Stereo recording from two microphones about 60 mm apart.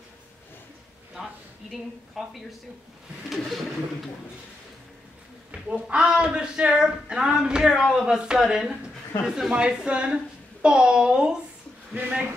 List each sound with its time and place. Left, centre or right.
1.1 s a sound: centre
3.3 s speech: centre
5.5 s a woman's voice: centre